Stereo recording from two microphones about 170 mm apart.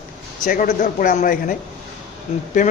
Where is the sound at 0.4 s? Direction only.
55° left (ahead or behind).